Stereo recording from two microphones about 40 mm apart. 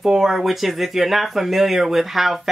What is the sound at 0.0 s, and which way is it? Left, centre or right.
Speech, centre.